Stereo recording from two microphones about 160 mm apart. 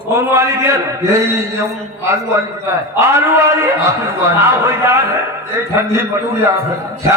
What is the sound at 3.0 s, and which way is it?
A man's voice, 15° right (ahead or behind).